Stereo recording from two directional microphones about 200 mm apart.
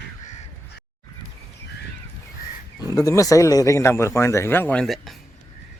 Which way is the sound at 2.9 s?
15° left (ahead or behind).